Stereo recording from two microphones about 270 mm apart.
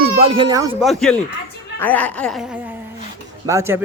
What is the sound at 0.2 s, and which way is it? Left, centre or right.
Speech, centre.